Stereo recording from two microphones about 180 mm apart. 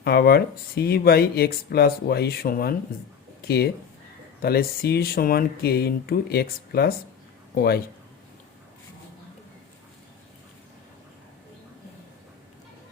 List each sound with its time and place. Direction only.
0.0 s a man's voice: 60° left (ahead or behind)